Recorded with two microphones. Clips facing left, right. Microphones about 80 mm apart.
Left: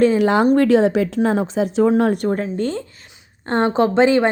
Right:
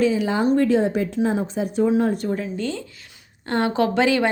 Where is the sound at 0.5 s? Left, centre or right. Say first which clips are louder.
Left 4 dB; left.